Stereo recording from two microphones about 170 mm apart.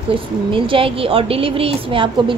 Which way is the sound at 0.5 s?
30° right (ahead or behind).